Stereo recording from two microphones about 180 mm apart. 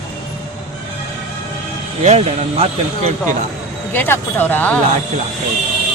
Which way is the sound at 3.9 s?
10° left (ahead or behind).